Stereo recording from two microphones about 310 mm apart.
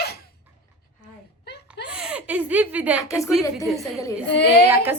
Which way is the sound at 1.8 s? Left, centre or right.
Centre.